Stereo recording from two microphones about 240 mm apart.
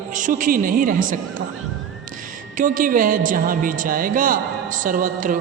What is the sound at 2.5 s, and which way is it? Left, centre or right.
Music, right.